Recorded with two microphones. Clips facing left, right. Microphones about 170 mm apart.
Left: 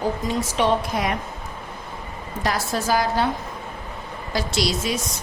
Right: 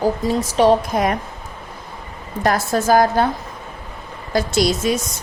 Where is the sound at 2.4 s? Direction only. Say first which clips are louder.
Right 6 dB; 50° right (ahead or behind).